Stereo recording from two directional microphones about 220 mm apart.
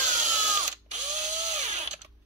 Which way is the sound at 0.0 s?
35° right (ahead or behind).